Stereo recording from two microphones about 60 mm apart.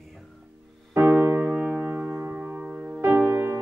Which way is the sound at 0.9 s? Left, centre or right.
Right.